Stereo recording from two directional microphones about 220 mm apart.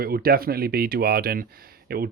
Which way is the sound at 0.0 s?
45° right (ahead or behind).